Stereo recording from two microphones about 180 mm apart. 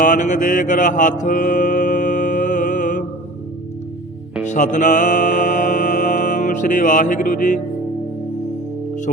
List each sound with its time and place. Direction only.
0.0 s mantra: 45° left (ahead or behind)
4.4 s music: 45° left (ahead or behind)